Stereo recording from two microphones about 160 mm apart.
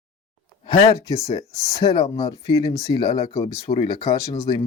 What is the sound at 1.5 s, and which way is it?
Speech, 40° left (ahead or behind).